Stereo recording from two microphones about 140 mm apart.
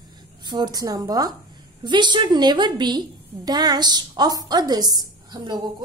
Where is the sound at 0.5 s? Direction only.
30° right (ahead or behind).